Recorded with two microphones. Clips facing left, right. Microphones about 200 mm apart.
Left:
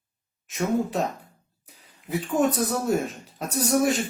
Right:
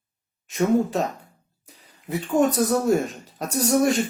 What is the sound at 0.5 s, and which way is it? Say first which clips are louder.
Speech: right 4 dB; centre (ahead or behind).